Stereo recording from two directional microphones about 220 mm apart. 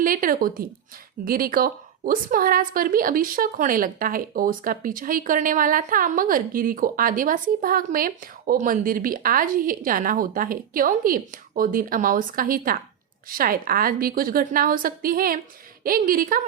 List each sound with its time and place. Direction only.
0.0 s a woman's voice: 40° right (ahead or behind)